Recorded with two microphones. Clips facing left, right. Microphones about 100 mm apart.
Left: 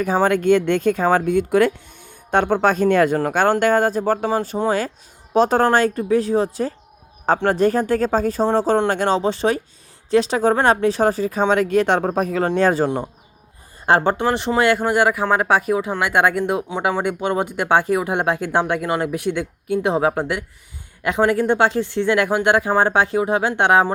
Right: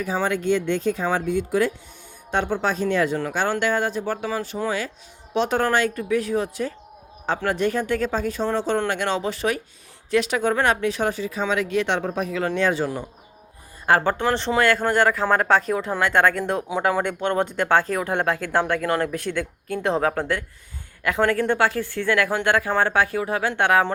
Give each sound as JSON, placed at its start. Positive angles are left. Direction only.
{"t": 0.0, "sound": "speech", "side_deg": 55}
{"t": 13.8, "sound": "speech", "side_deg": 20}
{"t": 14.2, "sound": "speech", "side_deg": 10}